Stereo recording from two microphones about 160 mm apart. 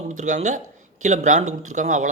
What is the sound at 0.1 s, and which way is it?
A man's voice, 50° right (ahead or behind).